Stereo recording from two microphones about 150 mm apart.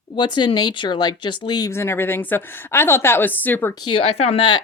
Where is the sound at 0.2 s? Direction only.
30° left (ahead or behind); by 3.8 s 15° left (ahead or behind).